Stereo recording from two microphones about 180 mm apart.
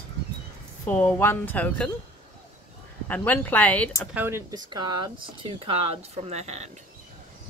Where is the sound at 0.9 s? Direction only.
10° left (ahead or behind).